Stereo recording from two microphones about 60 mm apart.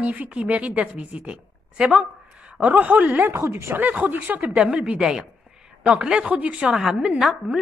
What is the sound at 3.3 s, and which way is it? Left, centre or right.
Speech, right.